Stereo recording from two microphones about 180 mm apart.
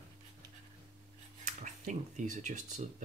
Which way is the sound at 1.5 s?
40° right (ahead or behind).